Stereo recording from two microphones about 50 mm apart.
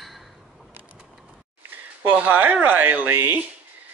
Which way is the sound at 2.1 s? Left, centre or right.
Right.